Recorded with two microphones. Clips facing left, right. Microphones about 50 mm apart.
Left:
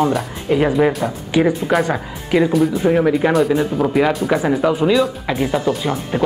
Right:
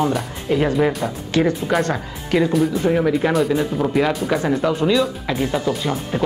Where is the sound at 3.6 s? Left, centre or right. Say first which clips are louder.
Left 3 dB; centre.